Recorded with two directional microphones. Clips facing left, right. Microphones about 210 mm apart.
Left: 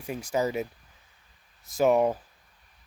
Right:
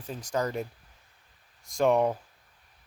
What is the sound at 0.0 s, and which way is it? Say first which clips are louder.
Speech: left 3 dB; 10° left (ahead or behind).